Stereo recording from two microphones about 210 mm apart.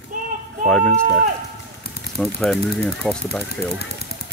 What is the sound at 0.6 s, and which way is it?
Speech, 5° left (ahead or behind).